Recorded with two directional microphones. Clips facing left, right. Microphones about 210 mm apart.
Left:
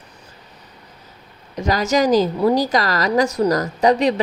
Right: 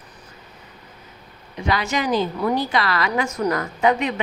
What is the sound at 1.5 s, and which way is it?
A woman's voice, 40° left (ahead or behind).